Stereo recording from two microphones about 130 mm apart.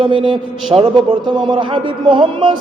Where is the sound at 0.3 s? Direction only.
40° right (ahead or behind).